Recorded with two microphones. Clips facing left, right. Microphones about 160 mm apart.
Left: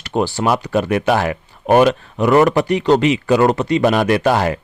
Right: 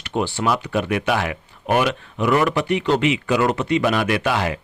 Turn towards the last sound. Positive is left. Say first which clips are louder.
# left 6 dB
turn(degrees=45)  # may be behind; listen again after turning